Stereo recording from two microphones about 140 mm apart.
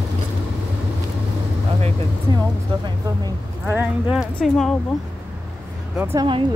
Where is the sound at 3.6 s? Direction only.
15° right (ahead or behind).